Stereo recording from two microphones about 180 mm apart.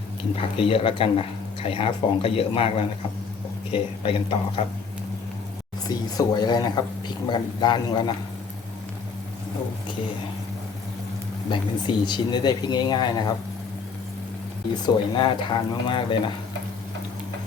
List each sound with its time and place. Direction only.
0.5 s speech: 30° left (ahead or behind)
5.9 s speech: 20° left (ahead or behind)
11.5 s speech: 25° left (ahead or behind)
14.8 s speech: 25° left (ahead or behind)